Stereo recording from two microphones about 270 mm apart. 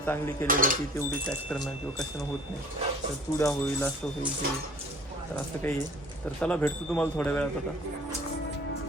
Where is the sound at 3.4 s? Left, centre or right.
Centre.